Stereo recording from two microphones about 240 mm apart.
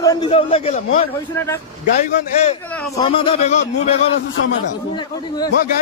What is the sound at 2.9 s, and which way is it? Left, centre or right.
A man's voice, centre.